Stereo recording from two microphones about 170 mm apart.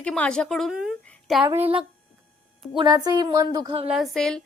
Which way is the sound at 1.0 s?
5° left (ahead or behind).